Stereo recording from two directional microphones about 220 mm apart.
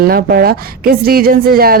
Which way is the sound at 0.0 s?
45° right (ahead or behind).